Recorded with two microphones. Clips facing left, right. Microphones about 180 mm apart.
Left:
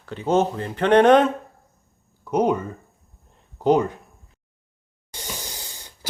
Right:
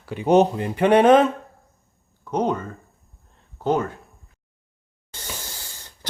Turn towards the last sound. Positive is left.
turn(degrees=15)  # may be behind; listen again after turning